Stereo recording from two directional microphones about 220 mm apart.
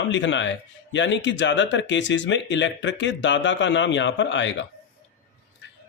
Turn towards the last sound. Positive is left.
turn(degrees=55)  # may be behind; listen again after turning